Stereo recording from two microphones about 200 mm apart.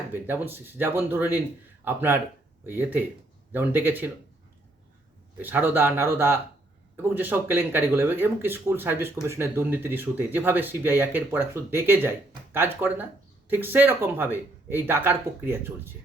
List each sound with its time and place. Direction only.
0.1 s speech: 10° right (ahead or behind)
5.4 s speech: 10° right (ahead or behind)